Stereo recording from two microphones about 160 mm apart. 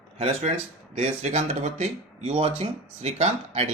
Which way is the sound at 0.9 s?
40° right (ahead or behind).